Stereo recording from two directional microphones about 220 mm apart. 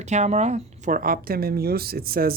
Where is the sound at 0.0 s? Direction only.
30° right (ahead or behind).